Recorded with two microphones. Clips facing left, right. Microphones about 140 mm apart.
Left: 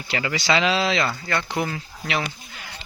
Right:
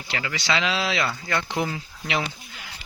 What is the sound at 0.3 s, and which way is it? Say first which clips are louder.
Speech: left 4 dB; 5° left (ahead or behind).